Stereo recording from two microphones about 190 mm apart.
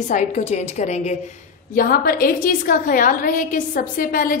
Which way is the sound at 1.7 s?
50° left (ahead or behind).